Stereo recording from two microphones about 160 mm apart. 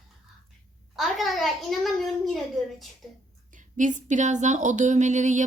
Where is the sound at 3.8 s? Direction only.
50° right (ahead or behind).